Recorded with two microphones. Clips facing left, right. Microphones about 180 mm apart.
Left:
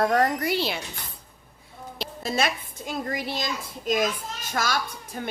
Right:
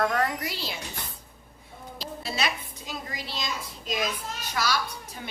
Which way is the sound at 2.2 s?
45° left (ahead or behind).